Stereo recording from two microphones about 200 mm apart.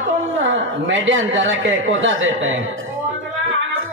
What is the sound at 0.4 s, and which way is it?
Speech, 70° right (ahead or behind).